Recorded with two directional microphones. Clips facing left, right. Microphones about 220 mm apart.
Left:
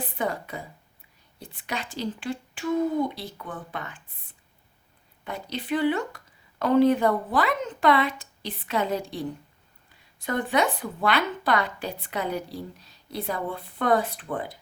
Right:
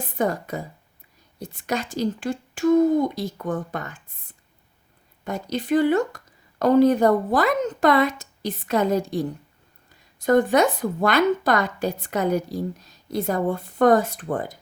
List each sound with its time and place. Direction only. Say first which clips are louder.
0.0 s speech: right 5 dB; 45° right (ahead or behind)
5.2 s speech: right 6 dB; 45° right (ahead or behind)